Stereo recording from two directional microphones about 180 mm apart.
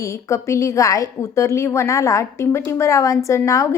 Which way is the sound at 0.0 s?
15° left (ahead or behind).